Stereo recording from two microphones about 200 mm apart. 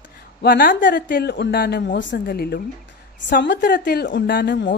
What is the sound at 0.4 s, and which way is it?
A woman's voice, 50° left (ahead or behind).